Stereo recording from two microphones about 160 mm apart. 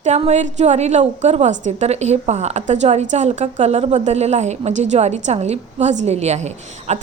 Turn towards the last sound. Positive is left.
turn(degrees=-45)  # may be behind; listen again after turning